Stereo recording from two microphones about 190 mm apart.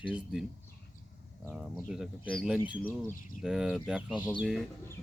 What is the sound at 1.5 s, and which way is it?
Speech, 5° right (ahead or behind).